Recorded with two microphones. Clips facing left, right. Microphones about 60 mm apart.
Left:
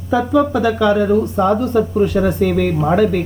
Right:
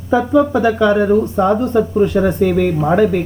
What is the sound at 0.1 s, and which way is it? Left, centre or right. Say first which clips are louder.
Speech: right 2 dB; right.